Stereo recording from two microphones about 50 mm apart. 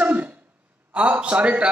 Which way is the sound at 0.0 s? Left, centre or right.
Right.